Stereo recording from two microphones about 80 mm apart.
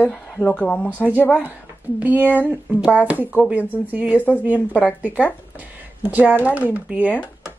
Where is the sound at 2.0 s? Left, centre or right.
Right.